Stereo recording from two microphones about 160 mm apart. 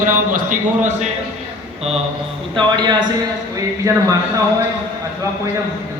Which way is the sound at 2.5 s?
30° right (ahead or behind).